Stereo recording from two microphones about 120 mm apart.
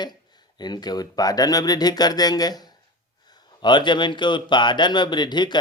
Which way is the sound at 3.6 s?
40° left (ahead or behind).